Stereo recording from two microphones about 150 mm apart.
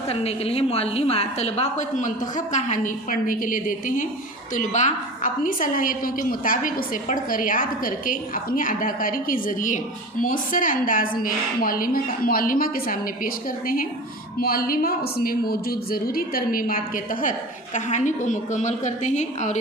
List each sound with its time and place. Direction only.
0.1 s a woman's voice: 40° left (ahead or behind); by 17.3 s 65° left (ahead or behind)
17.7 s a woman's voice: 55° left (ahead or behind)